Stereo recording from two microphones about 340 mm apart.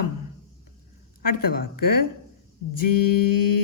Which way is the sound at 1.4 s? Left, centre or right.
Left.